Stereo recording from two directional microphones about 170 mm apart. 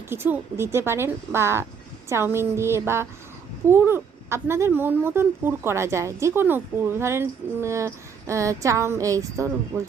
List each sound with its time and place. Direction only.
0.1 s speech: 15° right (ahead or behind)